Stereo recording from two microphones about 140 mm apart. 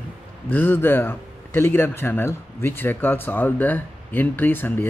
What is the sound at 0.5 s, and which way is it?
A man's voice, 15° left (ahead or behind).